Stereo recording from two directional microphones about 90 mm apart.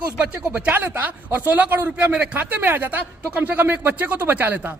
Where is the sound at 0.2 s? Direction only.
20° right (ahead or behind).